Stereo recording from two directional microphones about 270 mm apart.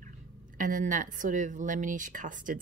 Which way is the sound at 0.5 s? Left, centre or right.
Right.